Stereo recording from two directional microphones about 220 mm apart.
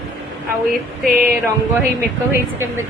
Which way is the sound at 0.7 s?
40° right (ahead or behind).